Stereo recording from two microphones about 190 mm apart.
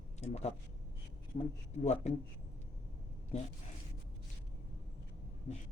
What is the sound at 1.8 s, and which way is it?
Speech, 35° left (ahead or behind).